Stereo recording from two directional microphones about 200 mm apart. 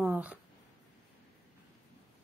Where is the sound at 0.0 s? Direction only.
5° right (ahead or behind).